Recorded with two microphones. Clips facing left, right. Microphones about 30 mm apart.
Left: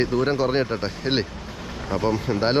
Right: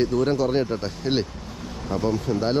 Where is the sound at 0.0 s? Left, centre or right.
Centre.